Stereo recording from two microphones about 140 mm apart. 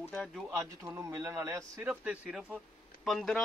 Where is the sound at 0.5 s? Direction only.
20° right (ahead or behind).